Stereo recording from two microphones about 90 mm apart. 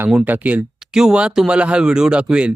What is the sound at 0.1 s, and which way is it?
Speech, 15° right (ahead or behind).